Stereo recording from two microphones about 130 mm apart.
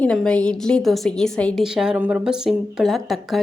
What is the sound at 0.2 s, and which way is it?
A woman's voice, 10° left (ahead or behind).